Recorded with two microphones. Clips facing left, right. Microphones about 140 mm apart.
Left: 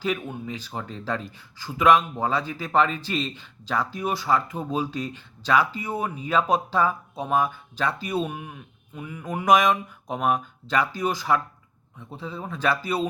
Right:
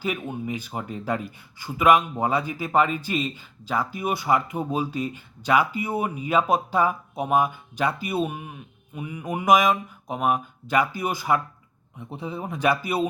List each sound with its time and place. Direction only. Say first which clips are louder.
0.0 s speech: even; 5° right (ahead or behind)